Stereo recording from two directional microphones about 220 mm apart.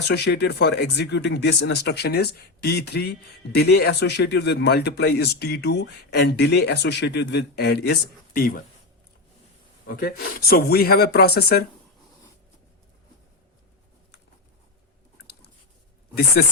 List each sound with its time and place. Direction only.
0.1 s speech: 50° left (ahead or behind)
9.8 s speech: 40° left (ahead or behind)
16.1 s speech: 45° left (ahead or behind)